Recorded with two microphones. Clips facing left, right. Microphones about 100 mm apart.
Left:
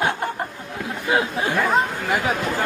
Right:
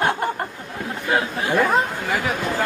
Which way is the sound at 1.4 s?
15° right (ahead or behind).